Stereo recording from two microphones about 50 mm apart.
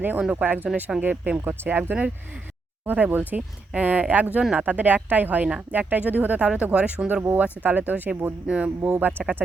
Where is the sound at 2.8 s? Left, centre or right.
Right.